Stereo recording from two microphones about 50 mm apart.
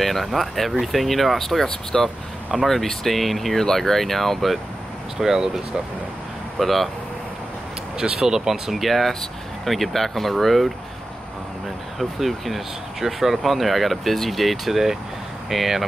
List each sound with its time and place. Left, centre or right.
0.0 s speech: centre
5.2 s speech: centre
6.6 s speech: centre
8.0 s speech: centre
12.0 s speech: centre